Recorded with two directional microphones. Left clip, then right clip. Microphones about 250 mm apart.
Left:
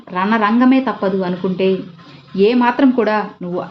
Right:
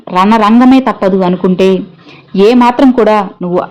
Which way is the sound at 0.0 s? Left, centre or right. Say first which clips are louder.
Right 8 dB; right.